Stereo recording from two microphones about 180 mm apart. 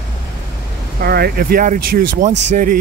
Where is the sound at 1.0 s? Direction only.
60° right (ahead or behind); by 2.7 s 45° right (ahead or behind).